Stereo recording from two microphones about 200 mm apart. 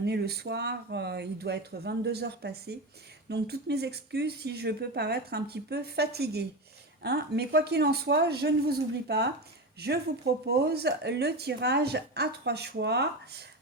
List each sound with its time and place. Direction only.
0.0 s speech: 55° right (ahead or behind)